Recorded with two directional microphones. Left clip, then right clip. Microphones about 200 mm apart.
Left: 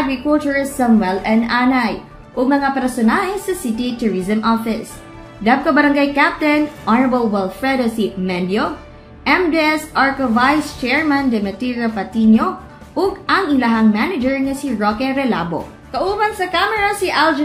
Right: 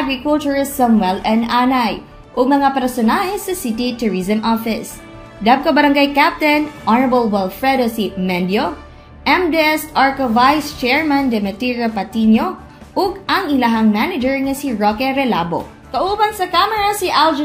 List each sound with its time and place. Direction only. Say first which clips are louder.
0.3 s a woman's voice: even; 25° right (ahead or behind)